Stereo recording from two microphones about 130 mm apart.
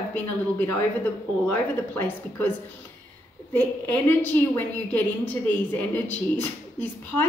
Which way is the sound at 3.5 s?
15° left (ahead or behind).